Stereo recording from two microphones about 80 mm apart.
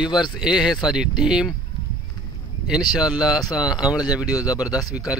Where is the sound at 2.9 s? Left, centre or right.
Centre.